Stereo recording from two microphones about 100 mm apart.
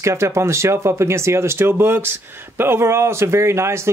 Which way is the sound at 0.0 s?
30° right (ahead or behind).